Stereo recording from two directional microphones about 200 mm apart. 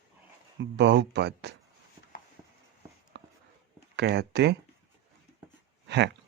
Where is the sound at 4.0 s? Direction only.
55° right (ahead or behind).